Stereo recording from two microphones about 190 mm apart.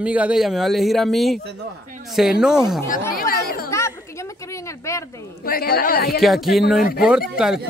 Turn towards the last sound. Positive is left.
turn(degrees=-5)  # may be behind; listen again after turning